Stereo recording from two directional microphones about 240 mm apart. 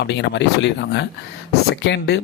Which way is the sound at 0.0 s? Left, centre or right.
Left.